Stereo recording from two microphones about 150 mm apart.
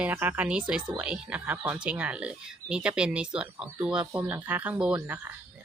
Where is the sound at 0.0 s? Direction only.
15° right (ahead or behind).